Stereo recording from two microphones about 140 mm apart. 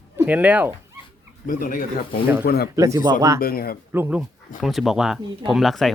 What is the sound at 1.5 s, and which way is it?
Speech, 70° left (ahead or behind).